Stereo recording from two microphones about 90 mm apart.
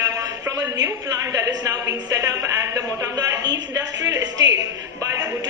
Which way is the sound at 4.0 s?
45° right (ahead or behind).